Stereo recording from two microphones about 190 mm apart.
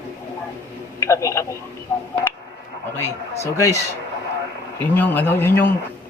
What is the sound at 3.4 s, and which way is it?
Speech, 15° left (ahead or behind).